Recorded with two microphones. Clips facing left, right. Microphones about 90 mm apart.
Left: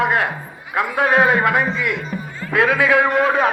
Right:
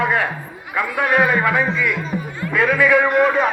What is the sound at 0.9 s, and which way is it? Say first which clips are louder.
Speech: left 2 dB; 25° left (ahead or behind).